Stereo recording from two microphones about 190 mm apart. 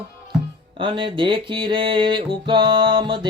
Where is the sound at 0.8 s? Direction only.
25° right (ahead or behind).